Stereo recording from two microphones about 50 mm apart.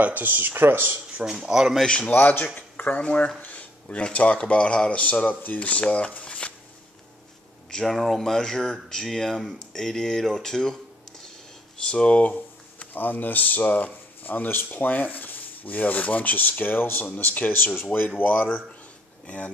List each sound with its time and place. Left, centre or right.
0.0 s speech: right
1.2 s speech: centre
2.0 s speech: left
3.3 s a sound: left
3.9 s speech: left
5.2 s speech: left
7.7 s speech: centre
11.9 s speech: left
19.2 s speech: left